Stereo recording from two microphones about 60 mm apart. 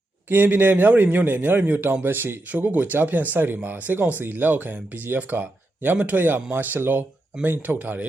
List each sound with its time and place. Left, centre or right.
0.3 s a man's voice: right